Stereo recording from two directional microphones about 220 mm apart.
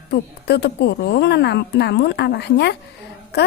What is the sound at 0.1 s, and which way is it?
A woman's voice, 50° left (ahead or behind).